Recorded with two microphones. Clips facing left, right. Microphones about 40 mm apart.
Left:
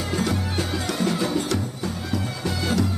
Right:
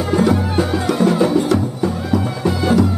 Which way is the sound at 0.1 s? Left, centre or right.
Centre.